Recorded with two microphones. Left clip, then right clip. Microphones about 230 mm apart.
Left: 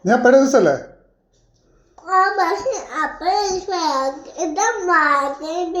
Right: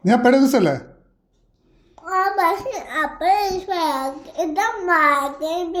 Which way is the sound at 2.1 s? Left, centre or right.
Right.